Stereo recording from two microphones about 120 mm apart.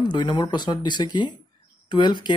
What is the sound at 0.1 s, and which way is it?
Speech, 40° left (ahead or behind).